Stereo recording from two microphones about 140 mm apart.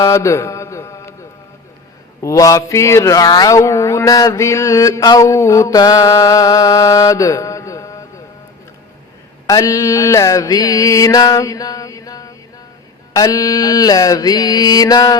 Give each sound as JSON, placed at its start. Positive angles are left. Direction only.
{"t": 0.0, "sound": "mantra", "side_deg": 20}
{"t": 2.2, "sound": "mantra", "side_deg": 25}
{"t": 9.5, "sound": "mantra", "side_deg": 25}